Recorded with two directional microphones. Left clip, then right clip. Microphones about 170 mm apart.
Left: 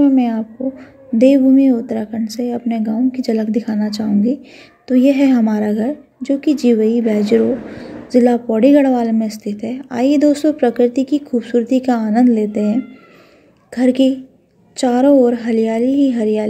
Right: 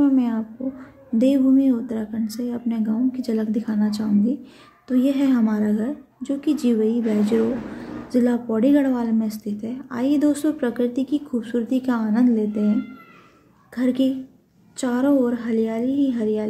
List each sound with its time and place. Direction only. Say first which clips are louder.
0.0 s a woman's voice: left 6 dB; 20° left (ahead or behind)